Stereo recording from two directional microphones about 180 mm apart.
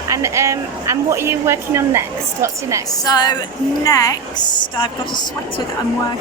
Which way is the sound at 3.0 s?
20° left (ahead or behind).